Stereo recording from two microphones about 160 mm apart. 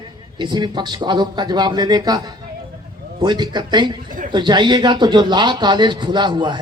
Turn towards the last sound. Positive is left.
turn(degrees=-30)  # may be behind; listen again after turning